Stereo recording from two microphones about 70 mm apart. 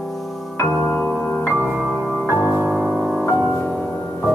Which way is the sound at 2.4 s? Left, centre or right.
Right.